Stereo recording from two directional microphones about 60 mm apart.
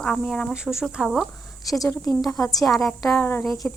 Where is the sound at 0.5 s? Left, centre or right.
Centre.